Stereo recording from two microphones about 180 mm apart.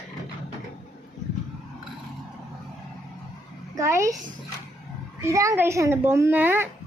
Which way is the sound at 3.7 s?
15° right (ahead or behind).